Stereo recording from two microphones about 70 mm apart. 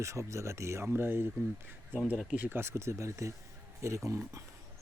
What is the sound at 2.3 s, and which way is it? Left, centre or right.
Speech, right.